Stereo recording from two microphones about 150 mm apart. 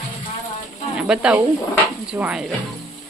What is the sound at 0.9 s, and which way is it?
A woman's voice, 5° right (ahead or behind).